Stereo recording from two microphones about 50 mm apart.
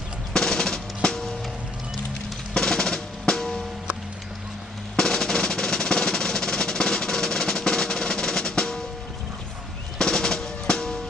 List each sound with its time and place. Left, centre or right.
0.3 s drum: centre
2.6 s drum: centre
4.9 s music: centre
10.0 s drum: centre